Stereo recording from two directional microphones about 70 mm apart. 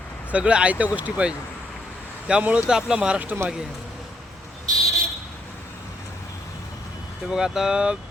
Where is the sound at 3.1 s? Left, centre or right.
Right.